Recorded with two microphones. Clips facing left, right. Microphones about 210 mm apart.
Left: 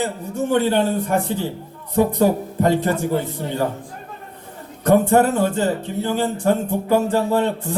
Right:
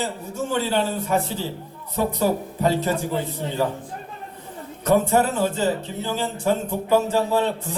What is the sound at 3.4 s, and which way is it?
Speech, 20° right (ahead or behind).